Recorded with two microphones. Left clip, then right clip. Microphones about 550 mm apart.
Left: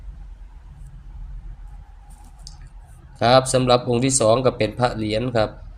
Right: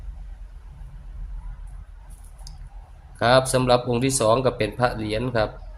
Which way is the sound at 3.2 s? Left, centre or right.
Right.